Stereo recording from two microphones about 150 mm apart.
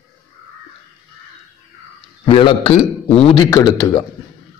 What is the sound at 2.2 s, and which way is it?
A man's voice, 35° left (ahead or behind).